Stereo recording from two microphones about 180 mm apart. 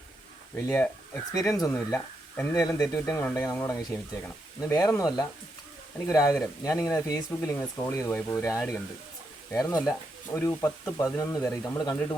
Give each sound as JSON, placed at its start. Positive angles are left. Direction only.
{"t": 0.5, "sound": "speech", "side_deg": 10}